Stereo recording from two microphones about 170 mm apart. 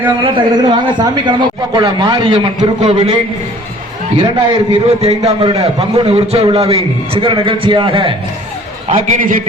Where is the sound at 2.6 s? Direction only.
40° right (ahead or behind).